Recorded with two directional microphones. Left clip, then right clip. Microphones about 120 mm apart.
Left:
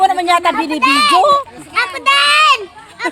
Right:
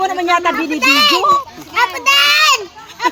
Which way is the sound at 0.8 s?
10° right (ahead or behind).